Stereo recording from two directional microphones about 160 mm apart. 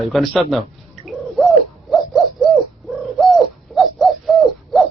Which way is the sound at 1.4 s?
Centre (ahead or behind).